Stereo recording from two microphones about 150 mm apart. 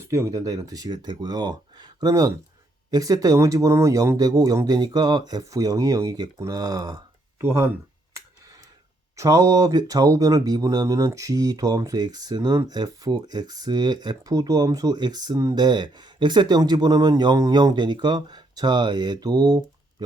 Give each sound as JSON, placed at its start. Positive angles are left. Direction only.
{"t": 0.0, "sound": "speech", "side_deg": -20}
{"t": 9.1, "sound": "speech", "side_deg": -20}